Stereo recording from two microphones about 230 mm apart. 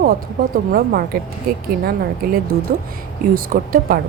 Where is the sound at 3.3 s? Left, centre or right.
Right.